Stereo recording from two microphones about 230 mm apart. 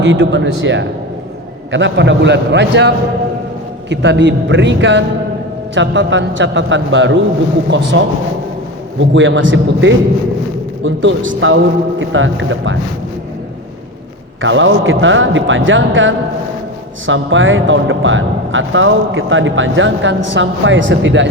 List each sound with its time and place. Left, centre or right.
0.0 s a man's voice: right
9.0 s speech: right
14.4 s speech: right